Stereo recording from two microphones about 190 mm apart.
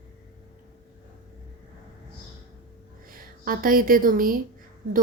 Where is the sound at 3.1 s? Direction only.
50° right (ahead or behind).